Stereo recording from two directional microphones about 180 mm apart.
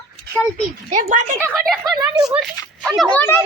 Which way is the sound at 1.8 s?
20° right (ahead or behind).